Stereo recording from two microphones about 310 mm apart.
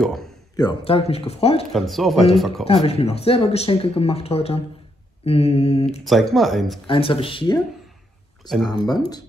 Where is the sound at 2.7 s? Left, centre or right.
Centre.